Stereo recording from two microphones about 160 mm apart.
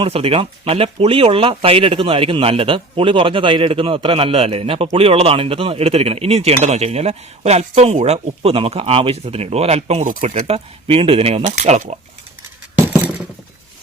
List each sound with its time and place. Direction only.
0.0 s speech: 35° right (ahead or behind)